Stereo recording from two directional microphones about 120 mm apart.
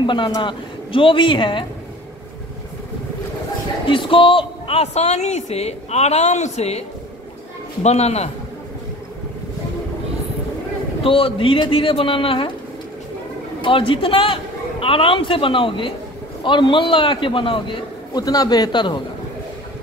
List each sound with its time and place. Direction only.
0.0 s a woman's voice: 40° left (ahead or behind)
3.8 s speech: 45° left (ahead or behind); by 6.8 s 65° left (ahead or behind)
7.8 s a man's voice: 65° left (ahead or behind)
11.1 s a man's voice: 50° left (ahead or behind)
13.6 s a man's voice: 45° left (ahead or behind)